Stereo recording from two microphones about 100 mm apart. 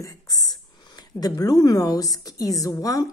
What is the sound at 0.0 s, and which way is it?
Speech, 35° left (ahead or behind).